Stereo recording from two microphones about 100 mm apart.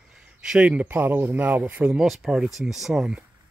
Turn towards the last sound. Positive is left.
turn(degrees=-5)  # may be behind; listen again after turning